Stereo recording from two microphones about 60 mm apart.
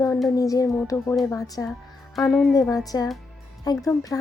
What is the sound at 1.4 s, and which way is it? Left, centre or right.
Speech, left.